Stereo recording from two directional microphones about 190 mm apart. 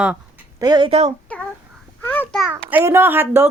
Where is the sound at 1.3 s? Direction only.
5° left (ahead or behind).